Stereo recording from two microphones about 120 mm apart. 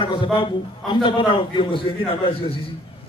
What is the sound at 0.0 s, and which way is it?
A man's voice, 45° left (ahead or behind).